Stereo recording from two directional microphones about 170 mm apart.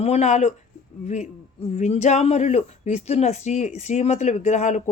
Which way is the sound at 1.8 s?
40° left (ahead or behind).